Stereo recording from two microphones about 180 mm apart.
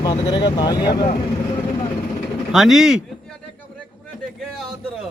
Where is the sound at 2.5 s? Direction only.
Centre (ahead or behind).